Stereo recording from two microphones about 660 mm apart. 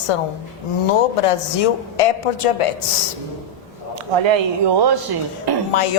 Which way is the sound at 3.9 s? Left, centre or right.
Right.